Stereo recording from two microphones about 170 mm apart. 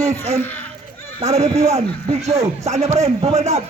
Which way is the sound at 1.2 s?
40° right (ahead or behind).